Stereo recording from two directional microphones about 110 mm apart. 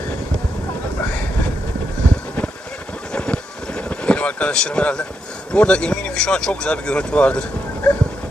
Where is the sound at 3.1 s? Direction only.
10° left (ahead or behind).